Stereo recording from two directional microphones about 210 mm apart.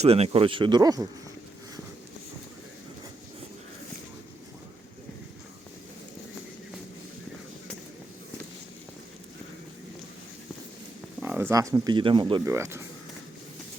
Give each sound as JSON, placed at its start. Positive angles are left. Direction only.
{"t": 0.0, "sound": "speech", "side_deg": -30}
{"t": 11.2, "sound": "speech", "side_deg": -10}